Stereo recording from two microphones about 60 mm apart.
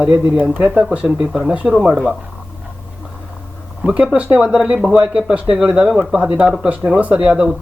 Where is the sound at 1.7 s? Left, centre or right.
Centre.